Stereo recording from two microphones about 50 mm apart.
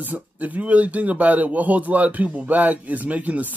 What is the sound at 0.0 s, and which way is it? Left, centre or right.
A man's voice, right.